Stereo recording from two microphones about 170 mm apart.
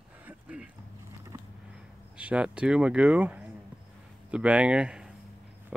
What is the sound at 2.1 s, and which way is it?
Speech, 5° right (ahead or behind).